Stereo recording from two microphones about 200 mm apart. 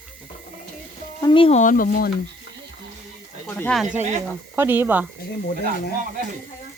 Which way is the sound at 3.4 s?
10° left (ahead or behind).